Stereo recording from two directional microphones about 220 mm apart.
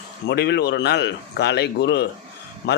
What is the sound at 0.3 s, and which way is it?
A man's voice, 50° left (ahead or behind).